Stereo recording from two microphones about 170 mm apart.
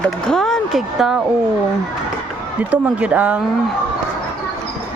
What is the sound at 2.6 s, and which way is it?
Speech, 10° right (ahead or behind).